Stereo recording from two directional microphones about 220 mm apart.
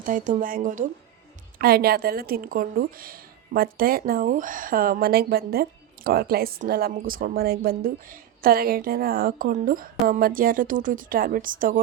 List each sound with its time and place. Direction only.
0.0 s a woman's voice: 40° right (ahead or behind)